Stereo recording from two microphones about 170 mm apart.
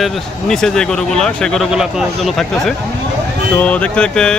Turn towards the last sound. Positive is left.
turn(degrees=5)  # may be behind; listen again after turning